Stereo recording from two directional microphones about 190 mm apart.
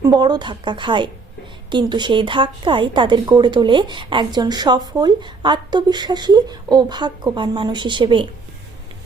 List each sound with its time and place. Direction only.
0.0 s a woman's voice: 20° right (ahead or behind)